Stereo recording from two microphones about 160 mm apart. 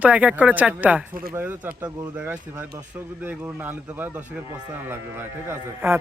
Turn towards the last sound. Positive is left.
turn(degrees=-15)  # may be behind; listen again after turning